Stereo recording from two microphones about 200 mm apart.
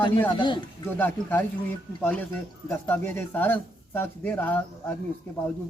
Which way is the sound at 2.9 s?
10° left (ahead or behind).